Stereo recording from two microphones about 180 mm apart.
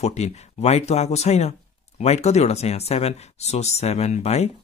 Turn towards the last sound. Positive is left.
turn(degrees=35)  # may be behind; listen again after turning